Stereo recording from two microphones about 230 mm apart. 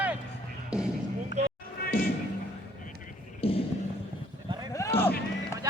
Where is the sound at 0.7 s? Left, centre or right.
Centre.